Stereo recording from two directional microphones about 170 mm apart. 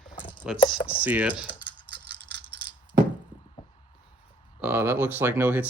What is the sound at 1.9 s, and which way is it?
Rattle, 85° right.